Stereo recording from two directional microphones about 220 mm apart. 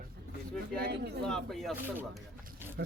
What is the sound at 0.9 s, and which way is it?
Speech, 50° right (ahead or behind).